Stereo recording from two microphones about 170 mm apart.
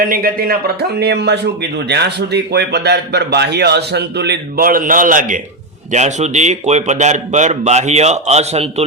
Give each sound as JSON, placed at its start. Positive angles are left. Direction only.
{"t": 0.0, "sound": "a man's voice", "side_deg": -55}